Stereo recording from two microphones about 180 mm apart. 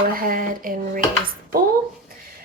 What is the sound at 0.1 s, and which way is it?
Speech, 50° right (ahead or behind).